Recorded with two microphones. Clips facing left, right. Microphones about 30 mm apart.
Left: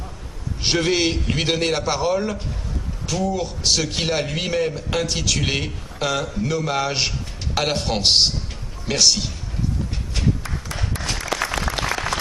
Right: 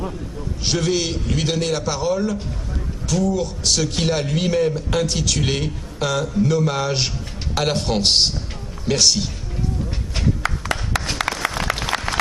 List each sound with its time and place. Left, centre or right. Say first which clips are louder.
0.7 s a man's voice: left 2 dB; left; by 9.3 s centre
10.4 s a sound: right 6 dB; right
11.3 s applause: left 4 dB; right
11.7 s applause: right 3 dB; right